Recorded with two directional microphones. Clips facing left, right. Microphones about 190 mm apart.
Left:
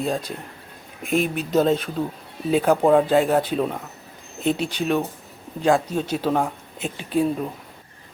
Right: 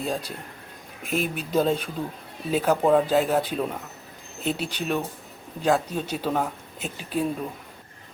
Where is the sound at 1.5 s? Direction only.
10° right (ahead or behind).